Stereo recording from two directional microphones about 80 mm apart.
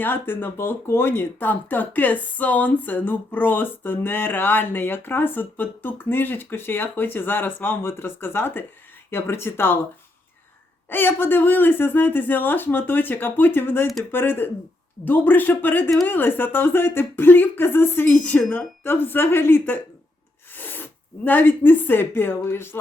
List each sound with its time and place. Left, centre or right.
0.0 s speech: left
10.8 s speech: left
21.2 s speech: left